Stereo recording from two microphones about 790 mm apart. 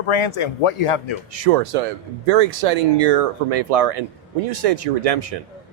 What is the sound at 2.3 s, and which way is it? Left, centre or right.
Speech, right.